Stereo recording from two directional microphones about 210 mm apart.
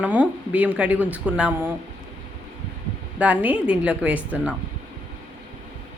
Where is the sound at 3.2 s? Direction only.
5° right (ahead or behind).